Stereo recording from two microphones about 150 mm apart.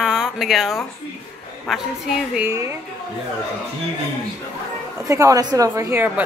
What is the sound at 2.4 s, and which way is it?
Speech, 20° right (ahead or behind).